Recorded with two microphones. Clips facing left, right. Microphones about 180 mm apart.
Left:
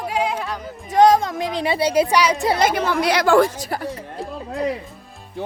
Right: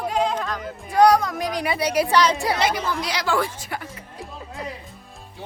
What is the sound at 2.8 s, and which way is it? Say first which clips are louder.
Speech: left 8 dB; 65° left (ahead or behind).